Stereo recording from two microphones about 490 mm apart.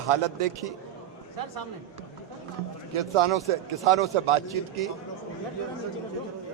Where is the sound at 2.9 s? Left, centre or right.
Right.